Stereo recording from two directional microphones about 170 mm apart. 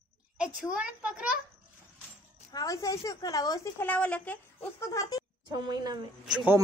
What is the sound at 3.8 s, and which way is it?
A child's voice, 10° left (ahead or behind).